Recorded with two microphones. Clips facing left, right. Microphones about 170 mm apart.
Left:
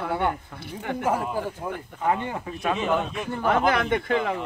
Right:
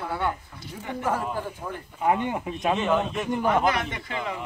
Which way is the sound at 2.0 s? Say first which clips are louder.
Right 2 dB; 15° right (ahead or behind).